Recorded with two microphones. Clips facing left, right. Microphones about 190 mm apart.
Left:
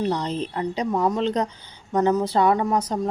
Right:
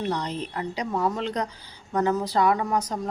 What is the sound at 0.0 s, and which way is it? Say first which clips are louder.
A woman's voice: left 4 dB; 25° left (ahead or behind).